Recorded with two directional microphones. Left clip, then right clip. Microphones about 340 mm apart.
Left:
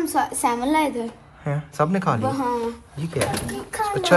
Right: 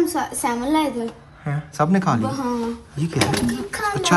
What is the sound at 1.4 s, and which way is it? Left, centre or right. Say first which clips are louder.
Speech: even; centre.